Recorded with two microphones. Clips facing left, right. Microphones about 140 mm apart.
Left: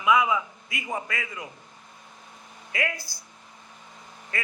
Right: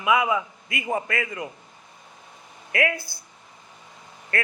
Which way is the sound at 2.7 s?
60° right (ahead or behind).